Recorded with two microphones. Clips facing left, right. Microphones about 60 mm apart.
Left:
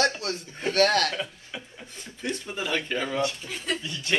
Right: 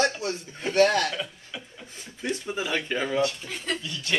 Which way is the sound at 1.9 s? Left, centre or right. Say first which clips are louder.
Right 1 dB; centre.